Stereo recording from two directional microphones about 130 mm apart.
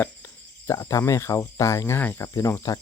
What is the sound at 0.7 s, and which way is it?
Speech, 25° left (ahead or behind).